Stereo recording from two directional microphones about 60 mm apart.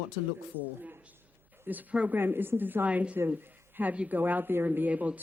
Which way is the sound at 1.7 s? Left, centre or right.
Right.